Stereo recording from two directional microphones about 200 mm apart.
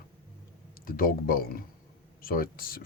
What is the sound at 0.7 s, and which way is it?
Speech, 45° left (ahead or behind).